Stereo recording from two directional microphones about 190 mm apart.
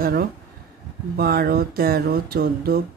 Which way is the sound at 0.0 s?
50° right (ahead or behind).